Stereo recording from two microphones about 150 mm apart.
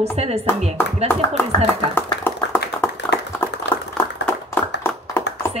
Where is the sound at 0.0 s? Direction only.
45° right (ahead or behind).